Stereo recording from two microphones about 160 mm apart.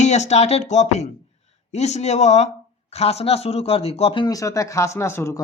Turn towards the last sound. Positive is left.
turn(degrees=15)  # may be behind; listen again after turning